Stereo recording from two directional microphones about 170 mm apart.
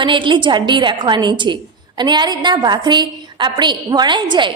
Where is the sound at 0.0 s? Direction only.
30° right (ahead or behind).